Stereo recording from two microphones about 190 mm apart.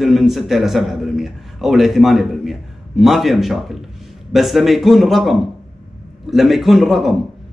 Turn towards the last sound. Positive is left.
turn(degrees=0)  # may be behind; listen again after turning